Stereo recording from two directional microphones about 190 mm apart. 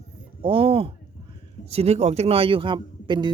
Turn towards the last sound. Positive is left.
turn(degrees=-25)  # may be behind; listen again after turning